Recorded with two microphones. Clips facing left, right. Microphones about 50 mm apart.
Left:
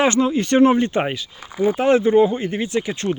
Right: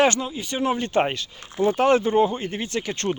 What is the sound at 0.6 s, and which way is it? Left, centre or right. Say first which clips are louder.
Speech: left 4 dB; left.